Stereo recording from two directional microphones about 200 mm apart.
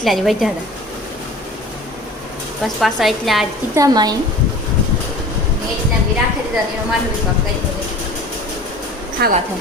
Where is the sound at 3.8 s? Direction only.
20° right (ahead or behind).